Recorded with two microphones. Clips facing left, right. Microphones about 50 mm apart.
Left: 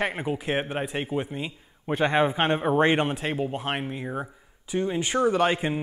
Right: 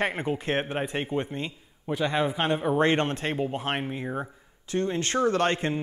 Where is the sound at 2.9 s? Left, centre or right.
Centre.